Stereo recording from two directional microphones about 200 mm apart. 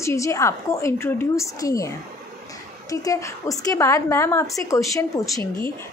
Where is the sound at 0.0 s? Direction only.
15° left (ahead or behind).